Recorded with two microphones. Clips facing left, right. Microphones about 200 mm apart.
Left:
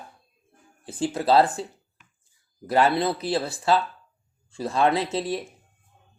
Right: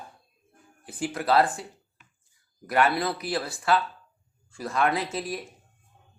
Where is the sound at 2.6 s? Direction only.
30° left (ahead or behind).